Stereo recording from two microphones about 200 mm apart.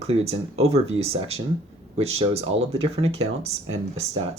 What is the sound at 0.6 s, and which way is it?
Speech, 90° right.